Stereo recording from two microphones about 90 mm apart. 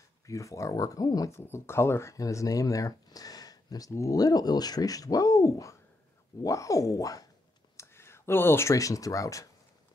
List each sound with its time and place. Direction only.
0.3 s speech: 35° left (ahead or behind)
1.3 s speech: 30° left (ahead or behind)
7.7 s speech: 30° left (ahead or behind)